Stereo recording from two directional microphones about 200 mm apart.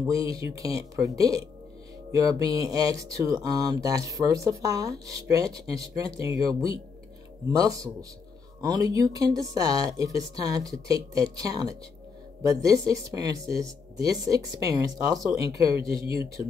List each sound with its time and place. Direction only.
0.0 s speech: 15° right (ahead or behind)